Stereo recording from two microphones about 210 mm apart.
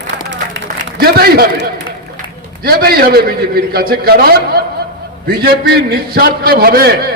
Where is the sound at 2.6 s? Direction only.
45° right (ahead or behind).